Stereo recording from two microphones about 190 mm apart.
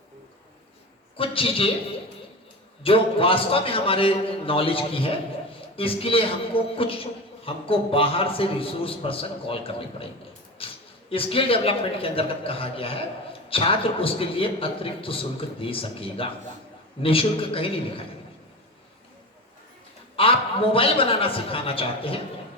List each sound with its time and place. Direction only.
1.1 s a man's voice: 30° left (ahead or behind)
2.8 s a man's voice: 30° left (ahead or behind)
10.6 s a sound: 30° left (ahead or behind)
11.1 s a man's voice: 30° left (ahead or behind)
20.1 s a man's voice: 30° left (ahead or behind)